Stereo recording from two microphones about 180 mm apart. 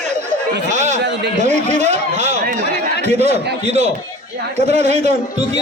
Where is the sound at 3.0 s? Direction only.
35° right (ahead or behind).